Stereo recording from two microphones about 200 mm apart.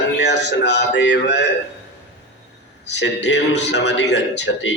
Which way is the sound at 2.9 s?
60° left (ahead or behind).